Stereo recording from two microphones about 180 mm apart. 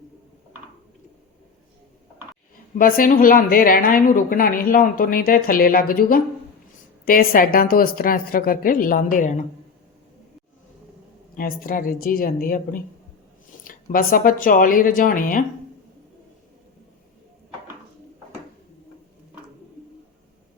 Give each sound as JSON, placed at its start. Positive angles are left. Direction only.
{"t": 2.7, "sound": "a woman's voice", "side_deg": 50}
{"t": 11.3, "sound": "a woman's voice", "side_deg": 55}